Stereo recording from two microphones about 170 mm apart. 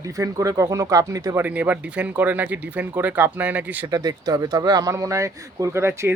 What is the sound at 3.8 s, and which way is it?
Speech, 25° right (ahead or behind).